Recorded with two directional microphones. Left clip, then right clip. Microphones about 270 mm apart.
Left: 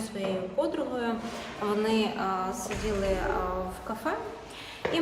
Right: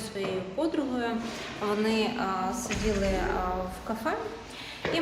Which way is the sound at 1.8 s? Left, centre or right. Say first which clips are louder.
Even; centre.